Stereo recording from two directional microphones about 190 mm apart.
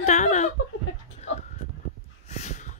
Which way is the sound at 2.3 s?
40° left (ahead or behind).